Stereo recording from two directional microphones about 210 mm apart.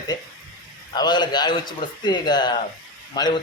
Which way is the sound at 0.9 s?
20° left (ahead or behind).